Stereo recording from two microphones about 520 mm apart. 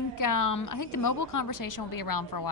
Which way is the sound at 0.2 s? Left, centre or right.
Left.